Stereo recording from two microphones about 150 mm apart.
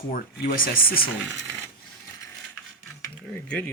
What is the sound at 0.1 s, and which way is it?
Speech, 70° left (ahead or behind).